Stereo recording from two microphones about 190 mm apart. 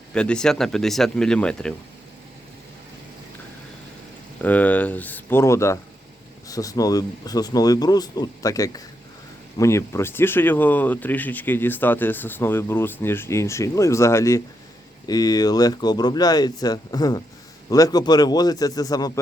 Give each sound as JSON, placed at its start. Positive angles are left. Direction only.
{"t": 0.1, "sound": "speech", "side_deg": 5}
{"t": 4.4, "sound": "speech", "side_deg": 10}